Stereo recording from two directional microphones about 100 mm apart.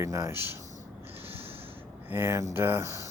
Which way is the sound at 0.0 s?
30° right (ahead or behind).